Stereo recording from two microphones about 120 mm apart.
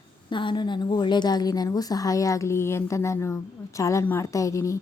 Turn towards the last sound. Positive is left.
turn(degrees=25)  # may be behind; listen again after turning